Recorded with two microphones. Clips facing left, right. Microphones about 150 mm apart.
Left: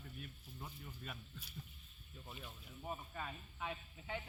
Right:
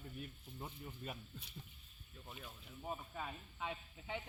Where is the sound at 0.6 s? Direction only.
25° right (ahead or behind).